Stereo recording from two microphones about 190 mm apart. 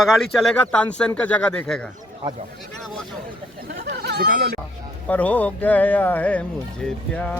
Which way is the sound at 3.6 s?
55° right (ahead or behind).